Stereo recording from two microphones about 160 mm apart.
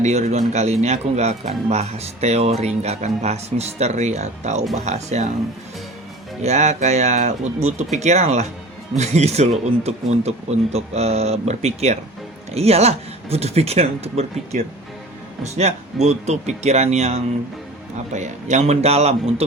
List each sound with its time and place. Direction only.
0.0 s speech: 45° right (ahead or behind)
6.4 s speech: 45° right (ahead or behind)